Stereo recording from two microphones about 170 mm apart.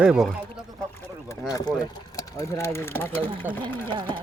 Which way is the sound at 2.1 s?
15° left (ahead or behind).